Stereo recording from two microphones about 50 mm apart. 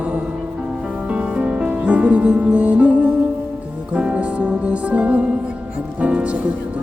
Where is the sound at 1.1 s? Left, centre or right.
Right.